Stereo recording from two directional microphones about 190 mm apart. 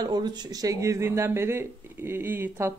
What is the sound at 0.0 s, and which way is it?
Speech, 20° right (ahead or behind).